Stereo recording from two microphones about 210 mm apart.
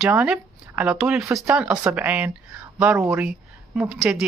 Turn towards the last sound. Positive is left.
turn(degrees=-5)  # may be behind; listen again after turning